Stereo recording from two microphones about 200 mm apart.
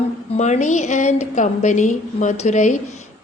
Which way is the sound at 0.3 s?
35° left (ahead or behind).